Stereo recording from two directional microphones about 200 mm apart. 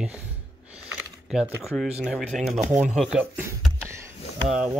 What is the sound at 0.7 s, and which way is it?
Typing, 5° right (ahead or behind).